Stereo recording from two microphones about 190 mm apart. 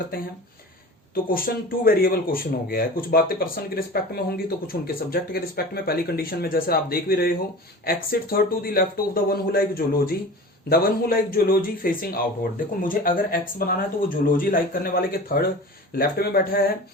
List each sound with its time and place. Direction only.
1.1 s speech: 50° left (ahead or behind)